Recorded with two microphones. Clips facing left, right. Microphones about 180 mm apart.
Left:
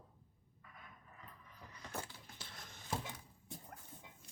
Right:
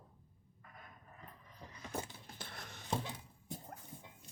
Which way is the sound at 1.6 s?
20° right (ahead or behind).